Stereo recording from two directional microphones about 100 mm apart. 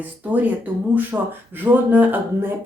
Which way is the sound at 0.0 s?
15° right (ahead or behind).